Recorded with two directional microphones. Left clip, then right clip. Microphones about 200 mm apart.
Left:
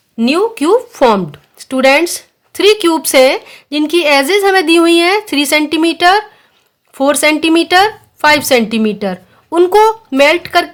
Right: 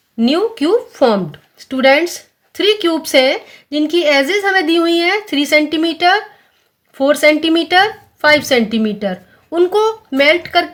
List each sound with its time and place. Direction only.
0.2 s speech: 30° left (ahead or behind)